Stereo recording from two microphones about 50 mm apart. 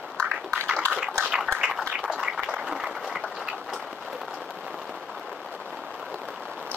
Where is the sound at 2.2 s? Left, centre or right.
Centre.